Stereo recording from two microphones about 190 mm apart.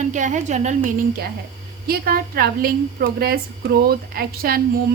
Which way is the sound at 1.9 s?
55° right (ahead or behind).